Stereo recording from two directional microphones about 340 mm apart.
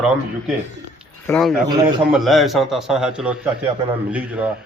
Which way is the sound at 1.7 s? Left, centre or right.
Centre.